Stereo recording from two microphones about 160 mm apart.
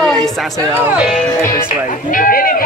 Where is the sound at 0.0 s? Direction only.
Centre (ahead or behind).